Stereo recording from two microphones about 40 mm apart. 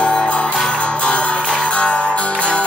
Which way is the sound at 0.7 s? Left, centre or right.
Left.